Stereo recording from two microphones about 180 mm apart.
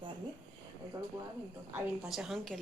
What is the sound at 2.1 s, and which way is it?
Speech, centre (ahead or behind).